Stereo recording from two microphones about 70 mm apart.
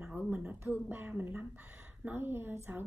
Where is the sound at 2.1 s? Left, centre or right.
Right.